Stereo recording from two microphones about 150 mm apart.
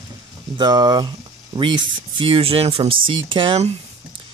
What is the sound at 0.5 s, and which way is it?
Speech, 25° right (ahead or behind).